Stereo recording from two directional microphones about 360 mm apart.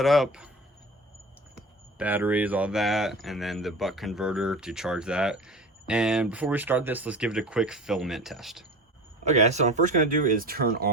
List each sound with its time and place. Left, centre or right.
0.0 s speech: centre
2.0 s speech: centre
9.2 s speech: centre